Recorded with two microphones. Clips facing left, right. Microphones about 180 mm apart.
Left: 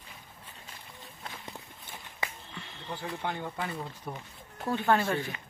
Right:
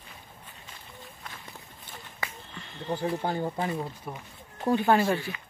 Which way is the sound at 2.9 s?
40° right (ahead or behind).